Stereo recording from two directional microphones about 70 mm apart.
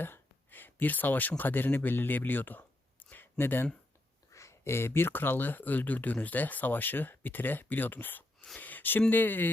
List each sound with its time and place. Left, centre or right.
0.0 s speech: left
3.1 s a sound: left
4.3 s speech: left